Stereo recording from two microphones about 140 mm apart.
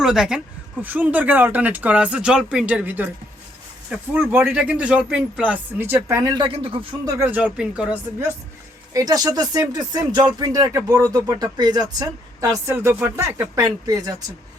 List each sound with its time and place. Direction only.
0.0 s speech: 5° right (ahead or behind); by 6.3 s 20° right (ahead or behind)
6.3 s speech: 40° right (ahead or behind)
7.0 s speech: 20° right (ahead or behind)
8.9 s speech: 25° right (ahead or behind)